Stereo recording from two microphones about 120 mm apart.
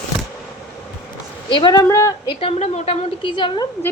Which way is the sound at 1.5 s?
40° left (ahead or behind).